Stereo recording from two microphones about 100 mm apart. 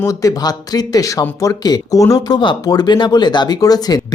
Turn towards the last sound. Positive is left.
turn(degrees=40)  # may be behind; listen again after turning